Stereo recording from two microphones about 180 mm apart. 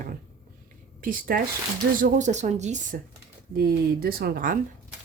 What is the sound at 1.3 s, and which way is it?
Speech, 55° right (ahead or behind).